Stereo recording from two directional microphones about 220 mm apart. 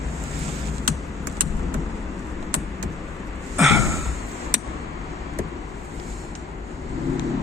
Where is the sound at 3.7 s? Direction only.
15° right (ahead or behind).